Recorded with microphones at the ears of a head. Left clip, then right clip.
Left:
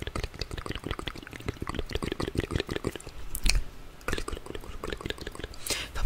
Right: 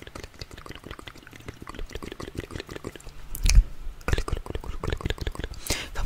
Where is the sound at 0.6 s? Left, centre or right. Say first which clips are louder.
Left 6 dB; left.